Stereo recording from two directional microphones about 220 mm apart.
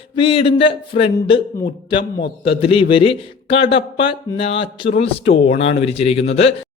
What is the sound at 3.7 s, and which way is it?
Speech, 25° left (ahead or behind).